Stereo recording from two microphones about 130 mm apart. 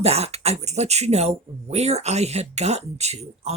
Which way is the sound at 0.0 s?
55° right (ahead or behind).